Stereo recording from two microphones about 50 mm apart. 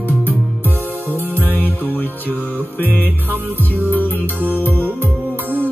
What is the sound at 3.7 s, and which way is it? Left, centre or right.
Music, left.